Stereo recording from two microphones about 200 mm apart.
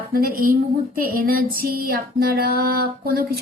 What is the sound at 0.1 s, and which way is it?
Music, 45° right (ahead or behind).